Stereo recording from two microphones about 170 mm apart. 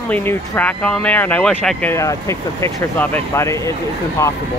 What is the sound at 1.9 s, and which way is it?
Speech, 15° left (ahead or behind).